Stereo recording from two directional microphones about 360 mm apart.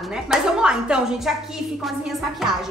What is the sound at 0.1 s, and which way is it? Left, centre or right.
A woman's voice, centre.